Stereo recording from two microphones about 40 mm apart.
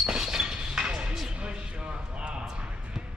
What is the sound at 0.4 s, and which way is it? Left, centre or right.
Chink, centre.